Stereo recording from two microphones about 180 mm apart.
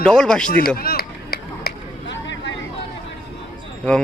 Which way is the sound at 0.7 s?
60° left (ahead or behind).